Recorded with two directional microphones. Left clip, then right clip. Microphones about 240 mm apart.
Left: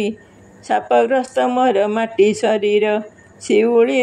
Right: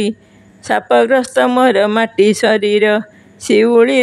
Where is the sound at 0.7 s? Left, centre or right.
Right.